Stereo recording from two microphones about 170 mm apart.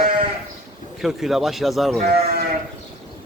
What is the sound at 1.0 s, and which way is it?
Speech, centre (ahead or behind).